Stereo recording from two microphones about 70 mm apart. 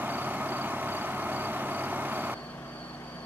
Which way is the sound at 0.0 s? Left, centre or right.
Right.